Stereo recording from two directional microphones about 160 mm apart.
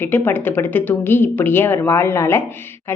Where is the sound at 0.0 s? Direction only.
15° left (ahead or behind).